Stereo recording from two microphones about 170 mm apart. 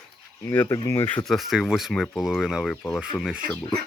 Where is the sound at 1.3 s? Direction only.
Centre (ahead or behind).